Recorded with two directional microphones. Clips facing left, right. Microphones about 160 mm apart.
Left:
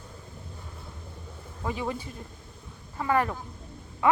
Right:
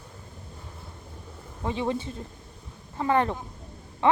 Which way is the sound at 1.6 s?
25° right (ahead or behind).